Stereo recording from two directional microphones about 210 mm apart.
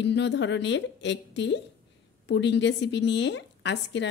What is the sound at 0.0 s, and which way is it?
A woman's voice, 55° left (ahead or behind).